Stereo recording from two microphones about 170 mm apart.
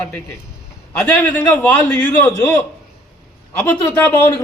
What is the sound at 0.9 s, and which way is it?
A man's voice, 10° left (ahead or behind).